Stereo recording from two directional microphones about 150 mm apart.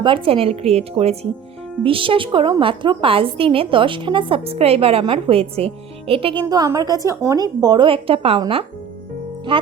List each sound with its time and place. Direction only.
0.0 s a woman's voice: 35° right (ahead or behind)
6.4 s a woman's voice: 25° right (ahead or behind)